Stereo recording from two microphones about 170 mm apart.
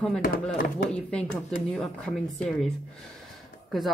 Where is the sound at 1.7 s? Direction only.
Centre (ahead or behind).